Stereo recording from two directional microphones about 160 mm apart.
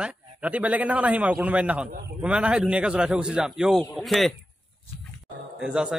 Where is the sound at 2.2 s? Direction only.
5° right (ahead or behind).